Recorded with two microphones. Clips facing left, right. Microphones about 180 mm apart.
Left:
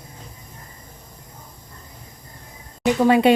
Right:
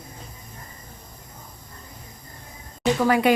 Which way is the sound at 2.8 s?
20° left (ahead or behind).